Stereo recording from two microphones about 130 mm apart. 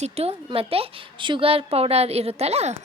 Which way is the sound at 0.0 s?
50° right (ahead or behind).